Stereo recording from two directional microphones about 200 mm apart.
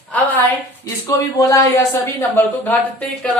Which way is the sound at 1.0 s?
15° left (ahead or behind).